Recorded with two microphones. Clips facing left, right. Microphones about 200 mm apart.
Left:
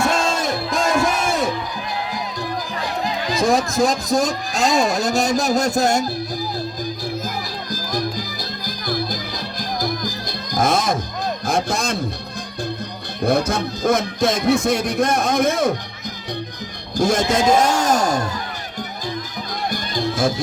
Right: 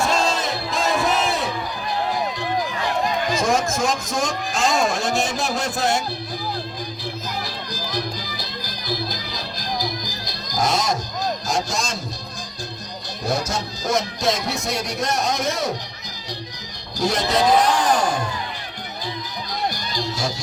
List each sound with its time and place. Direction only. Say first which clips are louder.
0.0 s crowd: left 1 dB; 50° left (ahead or behind)
3.3 s a man's voice: left 7 dB; 35° left (ahead or behind)
7.7 s music: left 5 dB; 45° left (ahead or behind)
11.4 s a man's voice: left 4 dB; 55° left (ahead or behind)
13.2 s music: left 6 dB; 55° left (ahead or behind)
17.0 s speech: left 3 dB; 50° left (ahead or behind)
19.7 s music: left 5 dB; 55° left (ahead or behind)